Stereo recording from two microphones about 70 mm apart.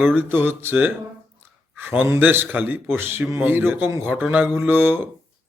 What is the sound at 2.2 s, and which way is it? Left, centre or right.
A man's voice, right.